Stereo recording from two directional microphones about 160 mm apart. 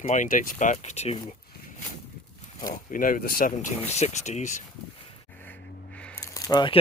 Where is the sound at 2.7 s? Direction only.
55° left (ahead or behind).